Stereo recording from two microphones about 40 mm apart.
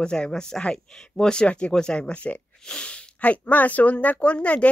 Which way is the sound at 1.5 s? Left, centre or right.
Left.